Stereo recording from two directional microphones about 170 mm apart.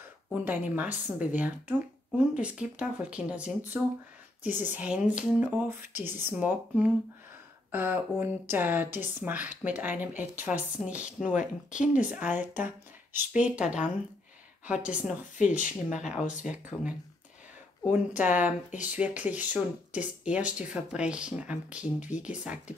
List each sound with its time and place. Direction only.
0.3 s speech: 10° right (ahead or behind)
11.3 s speech: 45° left (ahead or behind)
11.9 s speech: 10° right (ahead or behind)